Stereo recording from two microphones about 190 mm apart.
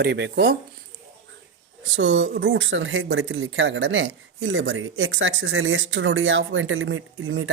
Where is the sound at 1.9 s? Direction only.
80° right.